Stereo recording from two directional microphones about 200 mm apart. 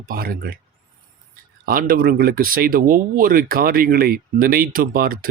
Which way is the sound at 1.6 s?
45° right (ahead or behind).